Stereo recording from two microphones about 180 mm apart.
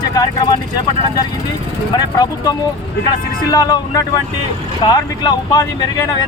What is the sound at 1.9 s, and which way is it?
Speech, 20° left (ahead or behind).